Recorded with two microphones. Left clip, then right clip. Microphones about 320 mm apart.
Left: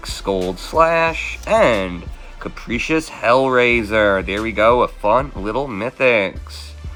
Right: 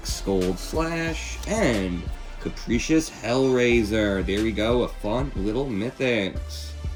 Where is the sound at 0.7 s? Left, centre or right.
Left.